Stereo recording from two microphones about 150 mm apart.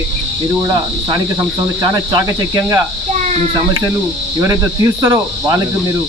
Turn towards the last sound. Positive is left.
turn(degrees=-20)  # may be behind; listen again after turning